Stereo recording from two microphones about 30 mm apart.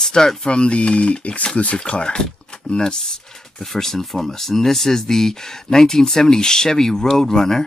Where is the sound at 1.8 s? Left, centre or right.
Left.